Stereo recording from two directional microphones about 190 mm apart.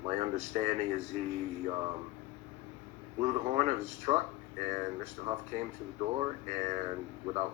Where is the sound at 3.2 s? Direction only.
30° right (ahead or behind).